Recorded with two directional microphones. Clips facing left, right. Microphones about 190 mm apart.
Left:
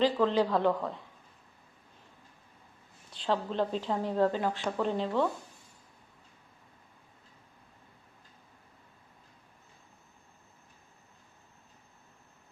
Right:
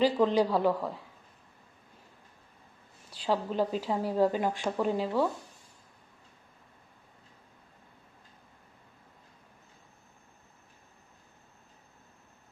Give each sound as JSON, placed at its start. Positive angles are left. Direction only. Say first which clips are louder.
{"t": 0.0, "sound": "a woman's voice", "louder": "right 1 dB", "side_deg": -15}
{"t": 3.1, "sound": "a woman's voice", "louder": "right 1 dB", "side_deg": -10}